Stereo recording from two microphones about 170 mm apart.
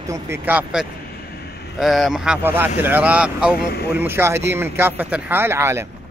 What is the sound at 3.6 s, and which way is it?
Speech, 70° left (ahead or behind).